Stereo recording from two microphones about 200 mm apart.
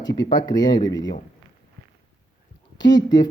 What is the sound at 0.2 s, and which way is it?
Speech, 20° left (ahead or behind).